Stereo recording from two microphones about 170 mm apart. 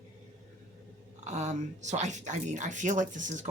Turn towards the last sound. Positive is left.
turn(degrees=-45)  # may be behind; listen again after turning